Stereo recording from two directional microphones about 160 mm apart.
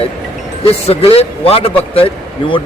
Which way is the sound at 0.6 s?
35° left (ahead or behind).